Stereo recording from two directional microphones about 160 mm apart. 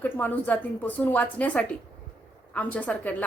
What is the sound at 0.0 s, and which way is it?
A woman's voice, 10° left (ahead or behind).